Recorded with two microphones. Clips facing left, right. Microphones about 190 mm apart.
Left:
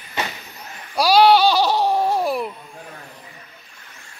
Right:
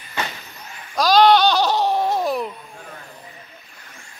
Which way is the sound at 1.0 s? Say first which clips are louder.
Even; 10° left (ahead or behind).